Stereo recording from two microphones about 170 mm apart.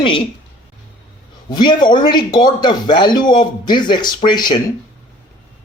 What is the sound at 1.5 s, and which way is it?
Speech, 25° left (ahead or behind).